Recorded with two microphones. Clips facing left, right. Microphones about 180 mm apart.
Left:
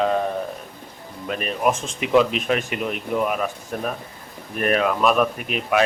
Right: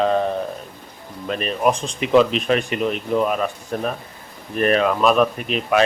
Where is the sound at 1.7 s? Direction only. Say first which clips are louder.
Right 2 dB; 20° right (ahead or behind).